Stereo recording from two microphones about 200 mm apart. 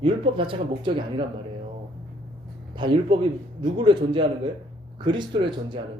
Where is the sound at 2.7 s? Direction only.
25° right (ahead or behind).